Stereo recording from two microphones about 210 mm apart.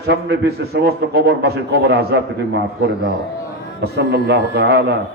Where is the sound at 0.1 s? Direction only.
50° right (ahead or behind).